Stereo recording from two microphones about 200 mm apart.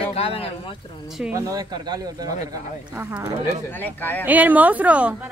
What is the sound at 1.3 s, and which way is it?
Speech, 15° right (ahead or behind).